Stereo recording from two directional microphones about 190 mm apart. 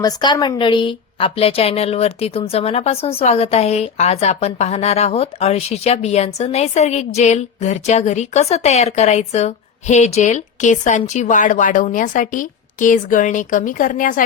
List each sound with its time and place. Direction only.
0.0 s a woman's voice: 20° left (ahead or behind); by 14.3 s 45° left (ahead or behind)